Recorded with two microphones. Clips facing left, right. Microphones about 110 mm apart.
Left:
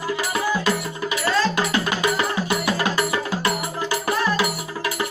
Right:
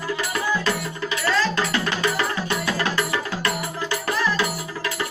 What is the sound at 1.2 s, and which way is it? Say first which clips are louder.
Music: left 1 dB; 15° left (ahead or behind).